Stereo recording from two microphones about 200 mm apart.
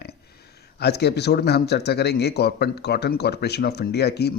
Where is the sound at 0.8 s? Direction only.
55° left (ahead or behind).